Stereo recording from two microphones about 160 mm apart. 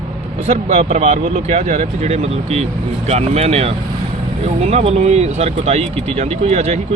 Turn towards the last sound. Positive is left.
turn(degrees=-40)  # may be behind; listen again after turning